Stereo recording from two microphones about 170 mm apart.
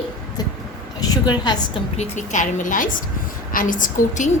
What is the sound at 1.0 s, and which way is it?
Speech, 25° left (ahead or behind).